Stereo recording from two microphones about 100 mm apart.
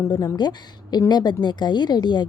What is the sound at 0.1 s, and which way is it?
A woman's voice, 40° left (ahead or behind).